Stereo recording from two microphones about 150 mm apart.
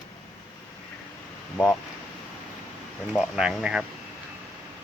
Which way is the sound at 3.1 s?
5° right (ahead or behind).